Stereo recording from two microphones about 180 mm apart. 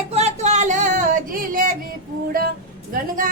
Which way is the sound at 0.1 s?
40° right (ahead or behind).